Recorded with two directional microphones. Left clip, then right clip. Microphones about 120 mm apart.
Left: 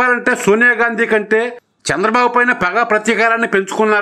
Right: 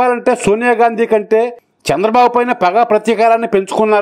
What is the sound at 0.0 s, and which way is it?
Speech, 40° right (ahead or behind).